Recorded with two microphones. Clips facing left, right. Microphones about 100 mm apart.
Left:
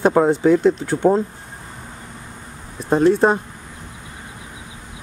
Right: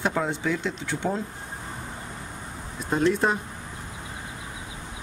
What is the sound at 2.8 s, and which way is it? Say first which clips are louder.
Speech: left 8 dB; 35° left (ahead or behind).